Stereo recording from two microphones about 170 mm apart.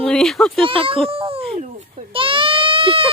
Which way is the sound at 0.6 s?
30° right (ahead or behind).